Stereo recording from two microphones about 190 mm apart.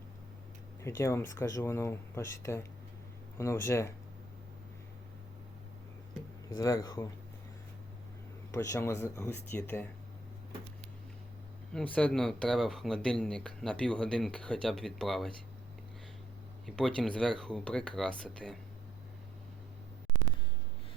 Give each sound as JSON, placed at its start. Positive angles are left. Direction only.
{"t": 0.8, "sound": "speech", "side_deg": 15}
{"t": 6.5, "sound": "speech", "side_deg": 20}
{"t": 8.5, "sound": "speech", "side_deg": 15}
{"t": 11.7, "sound": "speech", "side_deg": 5}
{"t": 16.6, "sound": "speech", "side_deg": 5}